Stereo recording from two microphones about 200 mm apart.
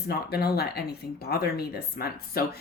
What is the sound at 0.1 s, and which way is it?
Speech, 50° left (ahead or behind).